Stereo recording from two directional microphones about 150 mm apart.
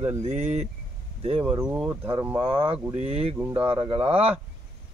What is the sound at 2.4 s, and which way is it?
Speech, 35° right (ahead or behind).